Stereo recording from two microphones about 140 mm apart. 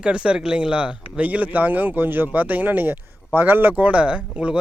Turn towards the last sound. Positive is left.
turn(degrees=-10)  # may be behind; listen again after turning